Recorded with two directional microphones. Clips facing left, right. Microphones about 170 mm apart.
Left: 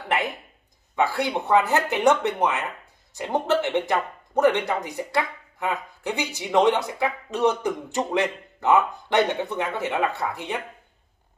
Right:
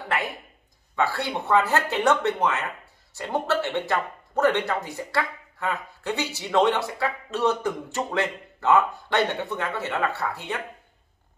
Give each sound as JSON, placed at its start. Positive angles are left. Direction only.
{"t": 0.9, "sound": "speech", "side_deg": 20}